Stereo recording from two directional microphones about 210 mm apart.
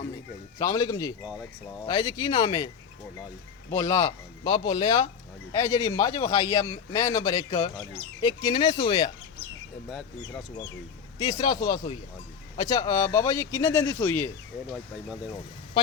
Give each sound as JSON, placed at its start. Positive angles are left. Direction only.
{"t": 0.6, "sound": "a man's voice", "side_deg": 15}
{"t": 3.7, "sound": "a man's voice", "side_deg": 15}
{"t": 11.2, "sound": "a man's voice", "side_deg": 20}